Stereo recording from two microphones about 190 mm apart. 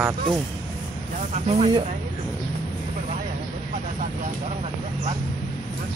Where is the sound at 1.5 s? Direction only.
30° right (ahead or behind).